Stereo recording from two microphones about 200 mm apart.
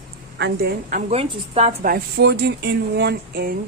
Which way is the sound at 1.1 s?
30° right (ahead or behind).